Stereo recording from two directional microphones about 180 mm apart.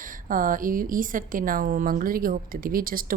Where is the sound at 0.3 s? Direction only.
50° right (ahead or behind).